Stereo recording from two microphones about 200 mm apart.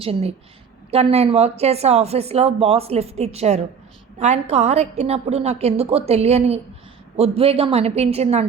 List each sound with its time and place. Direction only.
0.0 s a woman's voice: 30° right (ahead or behind)